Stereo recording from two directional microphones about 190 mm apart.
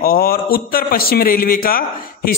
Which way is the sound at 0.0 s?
50° left (ahead or behind).